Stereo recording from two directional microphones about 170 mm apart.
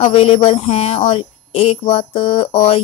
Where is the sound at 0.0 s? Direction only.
35° left (ahead or behind).